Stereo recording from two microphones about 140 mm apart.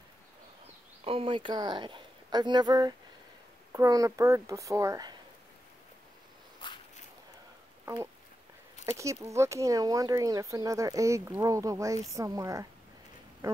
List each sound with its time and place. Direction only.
1.0 s a woman's voice: 40° right (ahead or behind); by 5.1 s 25° right (ahead or behind)
7.8 s a sound: 20° right (ahead or behind)
8.8 s speech: 20° right (ahead or behind)